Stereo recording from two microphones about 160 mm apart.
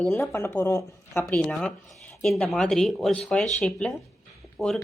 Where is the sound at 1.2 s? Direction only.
5° left (ahead or behind).